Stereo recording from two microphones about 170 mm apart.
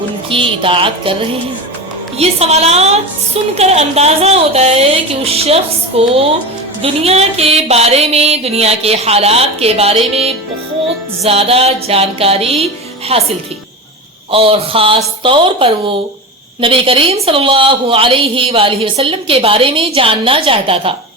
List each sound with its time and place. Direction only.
0.3 s a woman's voice: 30° right (ahead or behind)
2.1 s a woman's voice: 35° right (ahead or behind)
11.2 s a woman's voice: 35° right (ahead or behind)
14.3 s a woman's voice: 35° right (ahead or behind)